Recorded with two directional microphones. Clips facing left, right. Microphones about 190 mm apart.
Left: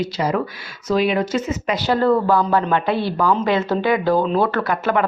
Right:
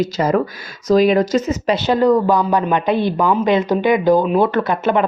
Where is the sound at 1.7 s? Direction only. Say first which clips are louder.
Right 2 dB; 20° right (ahead or behind).